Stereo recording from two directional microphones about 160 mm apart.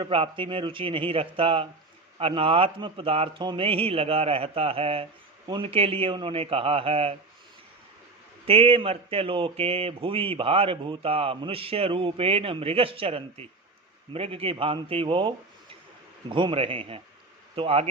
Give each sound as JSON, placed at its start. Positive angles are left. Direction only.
{"t": 0.0, "sound": "speech", "side_deg": -30}
{"t": 8.4, "sound": "speech", "side_deg": -35}